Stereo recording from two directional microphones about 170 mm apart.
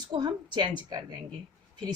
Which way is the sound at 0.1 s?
25° right (ahead or behind).